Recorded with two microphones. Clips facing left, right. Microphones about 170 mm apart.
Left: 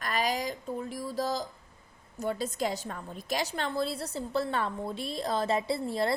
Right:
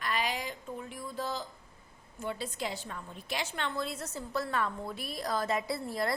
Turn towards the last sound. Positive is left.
turn(degrees=25)  # may be behind; listen again after turning